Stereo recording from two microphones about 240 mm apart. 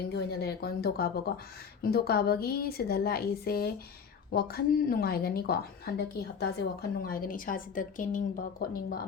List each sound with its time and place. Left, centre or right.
0.0 s speech: left